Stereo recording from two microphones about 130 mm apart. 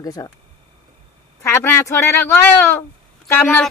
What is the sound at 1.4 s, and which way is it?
Speech, 20° left (ahead or behind).